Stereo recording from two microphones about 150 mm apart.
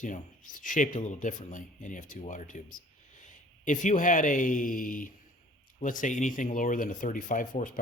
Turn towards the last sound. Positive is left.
turn(degrees=65)  # may be behind; listen again after turning